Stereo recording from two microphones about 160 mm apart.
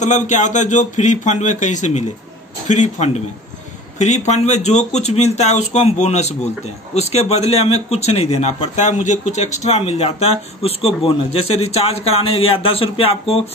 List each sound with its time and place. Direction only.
0.0 s a man's voice: 50° left (ahead or behind)